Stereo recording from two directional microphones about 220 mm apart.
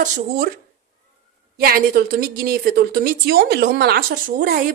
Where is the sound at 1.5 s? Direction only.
40° right (ahead or behind).